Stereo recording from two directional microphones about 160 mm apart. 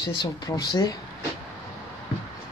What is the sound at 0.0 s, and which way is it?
Speech, 25° left (ahead or behind).